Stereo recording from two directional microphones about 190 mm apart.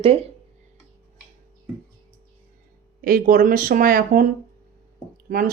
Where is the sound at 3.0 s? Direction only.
50° right (ahead or behind).